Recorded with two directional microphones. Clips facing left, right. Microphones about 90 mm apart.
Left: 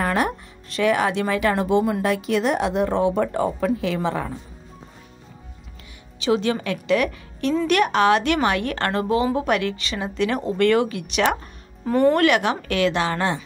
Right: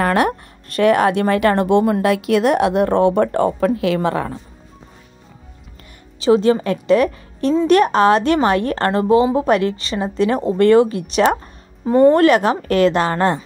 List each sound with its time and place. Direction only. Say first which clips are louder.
0.0 s speech: right 6 dB; 65° right (ahead or behind)
6.1 s a woman's voice: right 7 dB; 35° right (ahead or behind)
11.8 s a woman's voice: right 6 dB; 25° right (ahead or behind); by 13.4 s 45° right (ahead or behind)